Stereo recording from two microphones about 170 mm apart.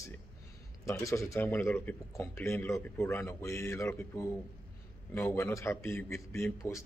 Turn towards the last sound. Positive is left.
turn(degrees=15)  # may be behind; listen again after turning